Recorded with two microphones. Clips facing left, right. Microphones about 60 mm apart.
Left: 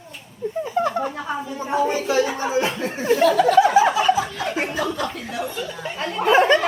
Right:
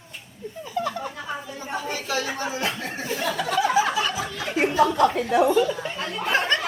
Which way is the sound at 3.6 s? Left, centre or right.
Left.